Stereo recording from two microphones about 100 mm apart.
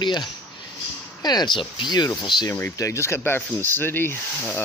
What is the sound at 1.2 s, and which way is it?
Speech, 40° left (ahead or behind).